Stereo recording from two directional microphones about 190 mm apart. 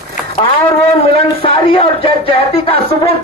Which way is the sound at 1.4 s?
30° left (ahead or behind).